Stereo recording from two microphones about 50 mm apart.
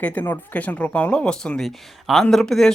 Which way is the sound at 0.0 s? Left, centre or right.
Left.